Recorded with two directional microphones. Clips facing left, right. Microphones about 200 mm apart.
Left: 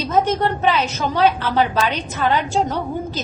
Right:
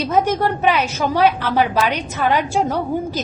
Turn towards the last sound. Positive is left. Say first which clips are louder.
# right 3 dB
turn(degrees=-10)  # may be behind; listen again after turning